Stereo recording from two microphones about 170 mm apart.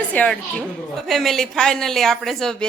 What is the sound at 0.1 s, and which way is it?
A woman's voice, 5° left (ahead or behind).